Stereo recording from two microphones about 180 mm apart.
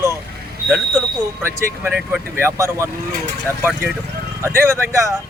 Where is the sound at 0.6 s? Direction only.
5° left (ahead or behind).